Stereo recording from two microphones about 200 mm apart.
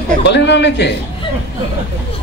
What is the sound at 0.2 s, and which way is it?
Speech, 60° left (ahead or behind).